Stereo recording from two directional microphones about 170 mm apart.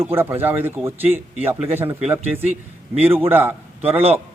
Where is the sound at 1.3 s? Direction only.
40° right (ahead or behind).